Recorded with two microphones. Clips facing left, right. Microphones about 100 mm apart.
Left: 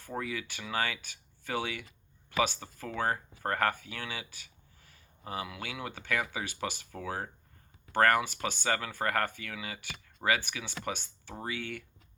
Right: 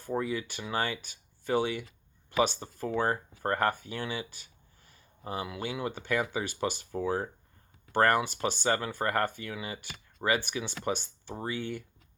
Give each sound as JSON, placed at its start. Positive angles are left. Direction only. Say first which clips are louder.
{"t": 0.2, "sound": "speech", "louder": "right 4 dB", "side_deg": -30}